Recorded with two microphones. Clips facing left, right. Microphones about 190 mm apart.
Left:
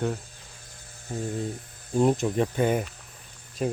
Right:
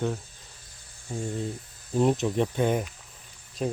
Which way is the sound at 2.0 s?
Centre (ahead or behind).